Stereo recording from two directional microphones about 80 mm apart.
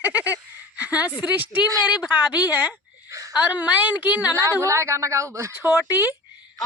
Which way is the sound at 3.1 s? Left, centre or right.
Right.